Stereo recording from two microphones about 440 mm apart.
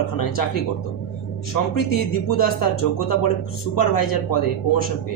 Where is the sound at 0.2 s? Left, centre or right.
Left.